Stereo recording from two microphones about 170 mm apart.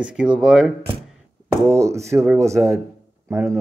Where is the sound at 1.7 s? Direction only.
15° right (ahead or behind).